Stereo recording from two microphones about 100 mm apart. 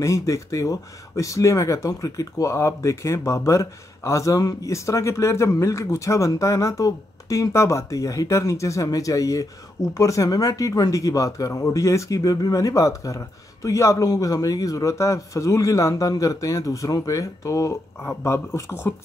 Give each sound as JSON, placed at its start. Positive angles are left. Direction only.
{"t": 0.0, "sound": "speech", "side_deg": 30}